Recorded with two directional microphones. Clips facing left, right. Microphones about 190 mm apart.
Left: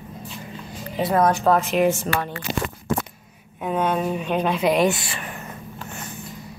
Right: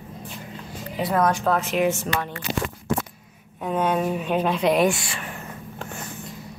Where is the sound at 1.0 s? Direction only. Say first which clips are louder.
Left 2 dB; 30° left (ahead or behind).